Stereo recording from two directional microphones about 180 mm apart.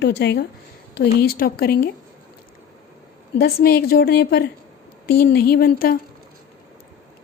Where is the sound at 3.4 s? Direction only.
60° left (ahead or behind).